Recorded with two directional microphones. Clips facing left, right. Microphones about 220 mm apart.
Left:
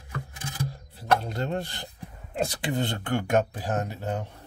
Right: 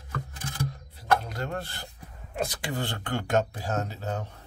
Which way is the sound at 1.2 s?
25° left (ahead or behind).